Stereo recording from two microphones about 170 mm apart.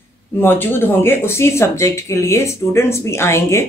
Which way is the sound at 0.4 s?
15° left (ahead or behind).